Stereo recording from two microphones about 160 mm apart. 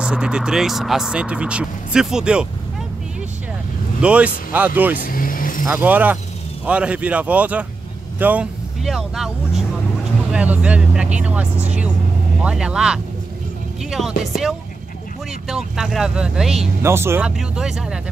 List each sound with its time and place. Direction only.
0.0 s speech: 5° right (ahead or behind)
4.0 s speech: 10° right (ahead or behind)
5.0 s vehicle: 60° left (ahead or behind)
5.7 s speech: 10° right (ahead or behind)
10.3 s speech: 10° right (ahead or behind)
16.8 s speech: 15° right (ahead or behind)
17.4 s speech: 5° right (ahead or behind)